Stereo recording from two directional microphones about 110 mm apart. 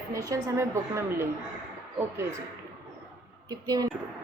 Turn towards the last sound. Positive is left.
turn(degrees=-35)  # may be behind; listen again after turning